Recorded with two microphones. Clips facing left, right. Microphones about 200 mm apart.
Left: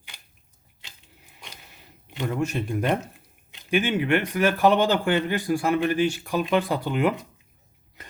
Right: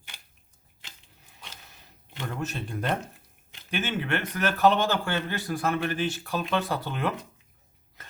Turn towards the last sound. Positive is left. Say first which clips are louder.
# left 6 dB
turn(degrees=15)  # may be behind; listen again after turning